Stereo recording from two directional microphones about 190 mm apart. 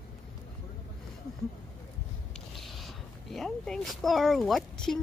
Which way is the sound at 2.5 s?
Centre (ahead or behind).